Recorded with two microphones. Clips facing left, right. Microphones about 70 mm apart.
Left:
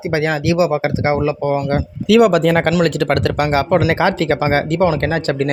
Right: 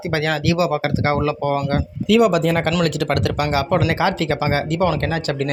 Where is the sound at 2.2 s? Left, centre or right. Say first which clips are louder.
Left 5 dB; left.